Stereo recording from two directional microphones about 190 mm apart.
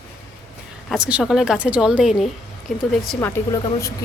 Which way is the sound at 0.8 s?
5° right (ahead or behind).